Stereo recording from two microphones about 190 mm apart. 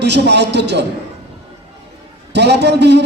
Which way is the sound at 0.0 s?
65° right (ahead or behind).